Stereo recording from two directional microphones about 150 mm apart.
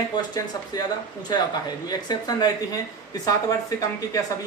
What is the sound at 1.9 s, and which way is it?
Speech, 25° left (ahead or behind).